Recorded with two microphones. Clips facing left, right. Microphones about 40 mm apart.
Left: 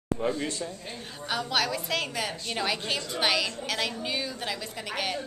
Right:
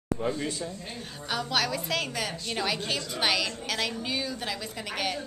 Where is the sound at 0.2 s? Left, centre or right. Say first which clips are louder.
Left 3 dB; centre.